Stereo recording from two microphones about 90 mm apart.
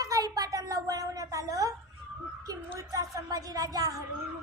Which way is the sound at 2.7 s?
40° right (ahead or behind).